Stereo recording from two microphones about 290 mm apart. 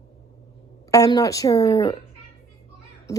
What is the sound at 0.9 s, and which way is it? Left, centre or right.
A woman's voice, centre.